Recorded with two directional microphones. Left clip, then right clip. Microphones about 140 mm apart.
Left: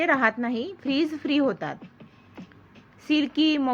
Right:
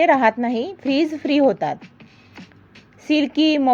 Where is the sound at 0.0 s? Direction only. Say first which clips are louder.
Right 7 dB; 30° right (ahead or behind).